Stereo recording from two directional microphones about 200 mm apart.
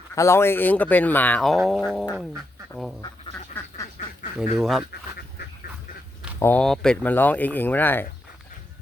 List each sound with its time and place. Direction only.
0.1 s speech: 15° left (ahead or behind)
4.5 s speech: centre (ahead or behind)
4.9 s speech: 55° left (ahead or behind)
6.4 s speech: 5° left (ahead or behind)